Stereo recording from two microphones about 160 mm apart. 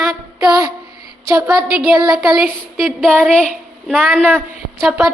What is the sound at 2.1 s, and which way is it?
A woman's voice, 5° right (ahead or behind).